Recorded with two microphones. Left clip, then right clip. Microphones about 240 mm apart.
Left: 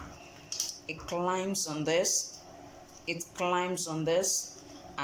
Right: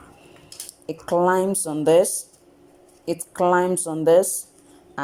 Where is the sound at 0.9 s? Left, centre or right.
Right.